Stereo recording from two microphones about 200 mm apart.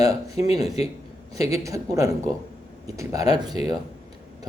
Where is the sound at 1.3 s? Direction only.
15° right (ahead or behind).